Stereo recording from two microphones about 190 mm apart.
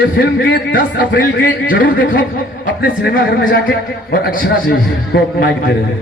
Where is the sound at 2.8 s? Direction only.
50° left (ahead or behind).